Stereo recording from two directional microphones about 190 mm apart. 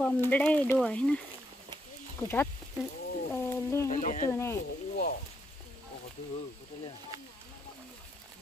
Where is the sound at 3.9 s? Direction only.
40° left (ahead or behind).